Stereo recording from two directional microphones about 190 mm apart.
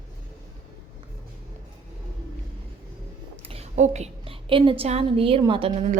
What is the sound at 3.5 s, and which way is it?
A woman's voice, 35° right (ahead or behind).